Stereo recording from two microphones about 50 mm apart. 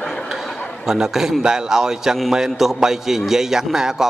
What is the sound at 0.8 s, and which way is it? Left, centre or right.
A man's voice, centre.